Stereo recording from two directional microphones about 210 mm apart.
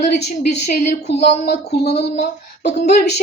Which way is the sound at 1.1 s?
30° left (ahead or behind).